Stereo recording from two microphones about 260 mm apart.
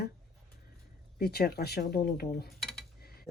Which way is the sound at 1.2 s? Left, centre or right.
Left.